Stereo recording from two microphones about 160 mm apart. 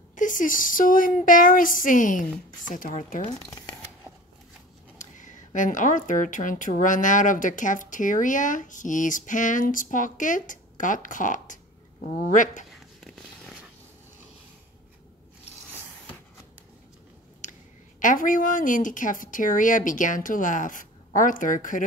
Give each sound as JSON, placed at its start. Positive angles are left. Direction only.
{"t": 0.1, "sound": "speech", "side_deg": 55}
{"t": 4.9, "sound": "speech", "side_deg": 50}
{"t": 17.4, "sound": "a woman's voice", "side_deg": 55}